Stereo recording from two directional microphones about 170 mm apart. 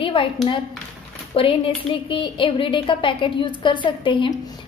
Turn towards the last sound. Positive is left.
turn(degrees=30)  # may be behind; listen again after turning